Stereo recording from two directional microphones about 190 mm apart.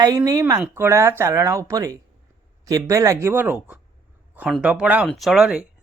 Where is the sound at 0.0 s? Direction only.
20° right (ahead or behind).